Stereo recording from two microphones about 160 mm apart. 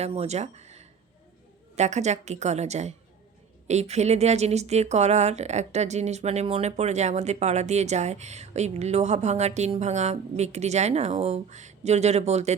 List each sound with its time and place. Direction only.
0.0 s speech: 40° right (ahead or behind)